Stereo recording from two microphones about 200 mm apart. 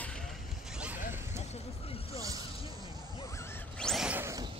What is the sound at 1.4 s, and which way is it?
Vehicle, 30° left (ahead or behind).